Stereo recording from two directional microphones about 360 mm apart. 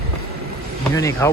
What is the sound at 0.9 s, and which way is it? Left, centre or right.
Speech, centre.